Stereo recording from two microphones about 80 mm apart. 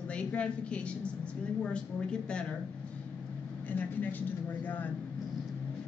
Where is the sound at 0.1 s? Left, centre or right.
Centre.